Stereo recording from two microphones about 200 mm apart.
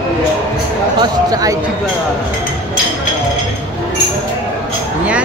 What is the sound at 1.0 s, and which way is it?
Speech, 20° right (ahead or behind).